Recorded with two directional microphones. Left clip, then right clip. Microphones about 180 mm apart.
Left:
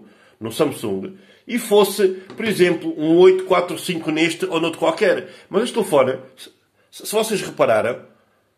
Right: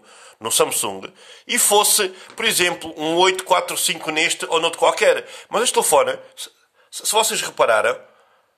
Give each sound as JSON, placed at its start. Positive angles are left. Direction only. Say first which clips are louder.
{"t": 0.4, "sound": "speech", "louder": "right 2 dB", "side_deg": -50}